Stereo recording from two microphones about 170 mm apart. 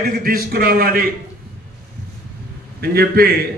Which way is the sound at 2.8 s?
60° right (ahead or behind).